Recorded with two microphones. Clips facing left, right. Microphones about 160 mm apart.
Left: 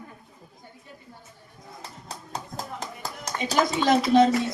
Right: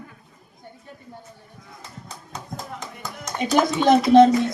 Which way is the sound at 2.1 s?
35° left (ahead or behind).